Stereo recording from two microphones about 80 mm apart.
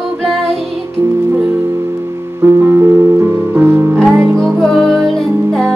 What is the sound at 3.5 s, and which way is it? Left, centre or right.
Music, right.